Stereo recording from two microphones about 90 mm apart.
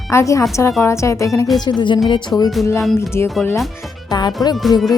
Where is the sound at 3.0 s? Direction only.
30° left (ahead or behind).